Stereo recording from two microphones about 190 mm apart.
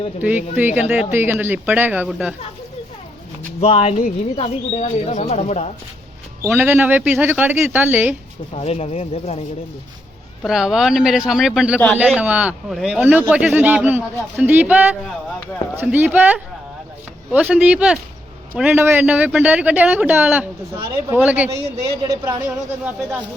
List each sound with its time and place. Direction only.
0.2 s speech: 10° right (ahead or behind)
3.6 s speech: 35° left (ahead or behind)
6.4 s speech: 10° right (ahead or behind)
8.5 s speech: 35° left (ahead or behind)
10.4 s speech: centre (ahead or behind); by 22.4 s 20° right (ahead or behind)
22.4 s speech: 10° right (ahead or behind)